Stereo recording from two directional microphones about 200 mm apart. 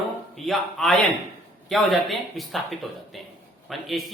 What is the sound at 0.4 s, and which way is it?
Speech, centre (ahead or behind).